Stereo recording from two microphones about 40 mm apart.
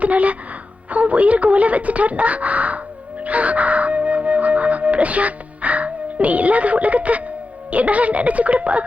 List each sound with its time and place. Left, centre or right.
0.0 s speech: right